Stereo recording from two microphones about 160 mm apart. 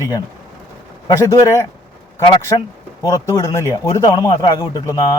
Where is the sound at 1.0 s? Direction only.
20° left (ahead or behind).